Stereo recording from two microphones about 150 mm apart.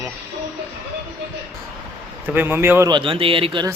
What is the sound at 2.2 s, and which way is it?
Speech, 10° right (ahead or behind).